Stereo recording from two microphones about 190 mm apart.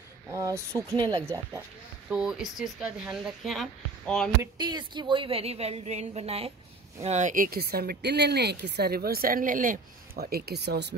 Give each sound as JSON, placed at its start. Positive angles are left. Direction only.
{"t": 0.3, "sound": "speech", "side_deg": -15}
{"t": 2.0, "sound": "speech", "side_deg": -5}
{"t": 4.4, "sound": "a woman's voice", "side_deg": -25}